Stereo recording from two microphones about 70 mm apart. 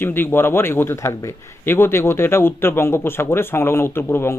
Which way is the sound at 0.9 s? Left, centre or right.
Left.